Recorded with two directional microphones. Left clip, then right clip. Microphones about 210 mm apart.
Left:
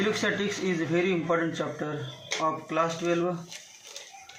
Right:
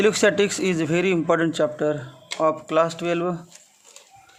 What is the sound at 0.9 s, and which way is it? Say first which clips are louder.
A man's voice: right 5 dB; 55° right (ahead or behind).